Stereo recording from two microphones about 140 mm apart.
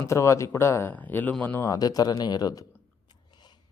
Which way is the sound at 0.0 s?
20° left (ahead or behind).